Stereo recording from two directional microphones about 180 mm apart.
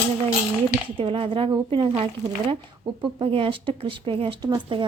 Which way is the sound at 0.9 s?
30° right (ahead or behind).